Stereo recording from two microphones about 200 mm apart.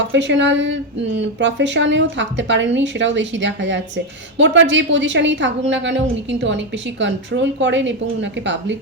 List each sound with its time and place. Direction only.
0.1 s speech: 65° right (ahead or behind)